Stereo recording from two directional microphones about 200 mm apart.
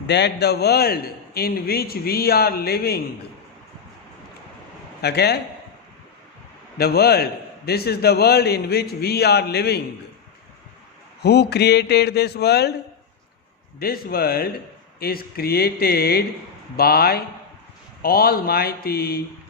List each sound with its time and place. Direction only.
0.1 s a man's voice: 60° left (ahead or behind)
5.0 s a man's voice: 55° left (ahead or behind)
6.7 s a man's voice: 50° left (ahead or behind)
11.2 s a man's voice: 55° left (ahead or behind)
13.7 s a man's voice: 50° left (ahead or behind)